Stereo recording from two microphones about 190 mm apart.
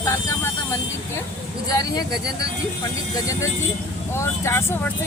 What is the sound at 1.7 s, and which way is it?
Speech, 20° left (ahead or behind).